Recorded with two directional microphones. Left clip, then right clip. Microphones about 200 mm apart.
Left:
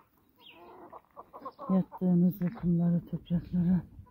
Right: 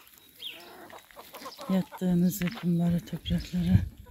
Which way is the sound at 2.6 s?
20° right (ahead or behind).